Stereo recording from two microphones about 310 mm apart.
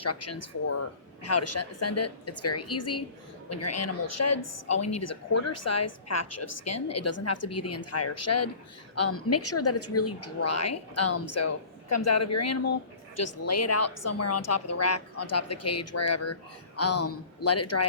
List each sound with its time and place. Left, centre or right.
0.0 s a woman's voice: left